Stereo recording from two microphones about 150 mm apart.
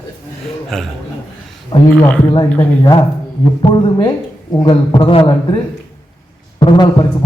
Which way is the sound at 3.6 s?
35° left (ahead or behind).